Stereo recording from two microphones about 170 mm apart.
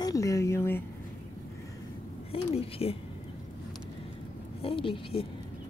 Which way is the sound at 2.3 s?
35° left (ahead or behind).